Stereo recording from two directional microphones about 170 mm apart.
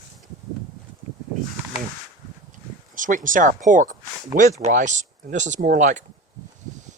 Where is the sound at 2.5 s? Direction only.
50° right (ahead or behind).